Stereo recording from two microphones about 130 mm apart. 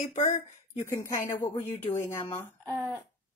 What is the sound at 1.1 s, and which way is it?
Speech, 25° left (ahead or behind).